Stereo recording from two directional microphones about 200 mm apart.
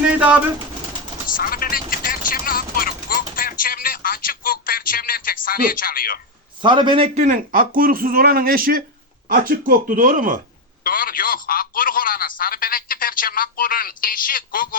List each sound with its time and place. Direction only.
0.0 s pigeon: 5° right (ahead or behind)
1.3 s a sound: 45° left (ahead or behind)
6.6 s a man's voice: 25° right (ahead or behind); by 10.4 s 40° right (ahead or behind)
10.8 s speech: 45° left (ahead or behind)